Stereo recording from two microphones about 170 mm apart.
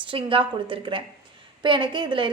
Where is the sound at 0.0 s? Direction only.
30° right (ahead or behind).